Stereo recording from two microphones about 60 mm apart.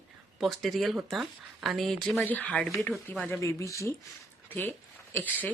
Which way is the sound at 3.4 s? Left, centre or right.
Left.